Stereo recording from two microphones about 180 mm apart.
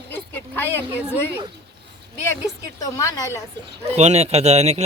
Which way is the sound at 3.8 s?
40° right (ahead or behind).